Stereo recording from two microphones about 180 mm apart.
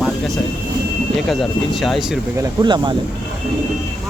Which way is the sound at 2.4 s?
25° right (ahead or behind).